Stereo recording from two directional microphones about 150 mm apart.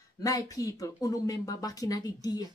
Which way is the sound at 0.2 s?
25° left (ahead or behind).